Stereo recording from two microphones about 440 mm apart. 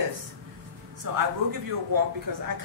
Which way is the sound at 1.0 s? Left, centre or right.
Right.